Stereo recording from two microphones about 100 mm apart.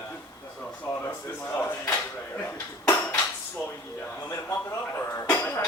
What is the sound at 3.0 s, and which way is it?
Dishes, 5° left (ahead or behind).